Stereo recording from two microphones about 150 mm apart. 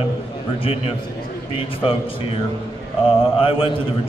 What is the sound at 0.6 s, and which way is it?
A man's voice, 40° left (ahead or behind).